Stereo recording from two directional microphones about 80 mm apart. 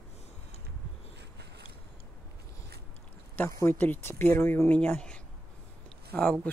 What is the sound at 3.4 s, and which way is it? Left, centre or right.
Speech, left.